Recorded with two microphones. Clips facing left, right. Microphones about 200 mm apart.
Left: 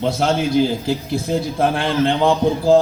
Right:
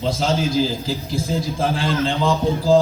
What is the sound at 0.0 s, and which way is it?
A man's voice, 60° left (ahead or behind).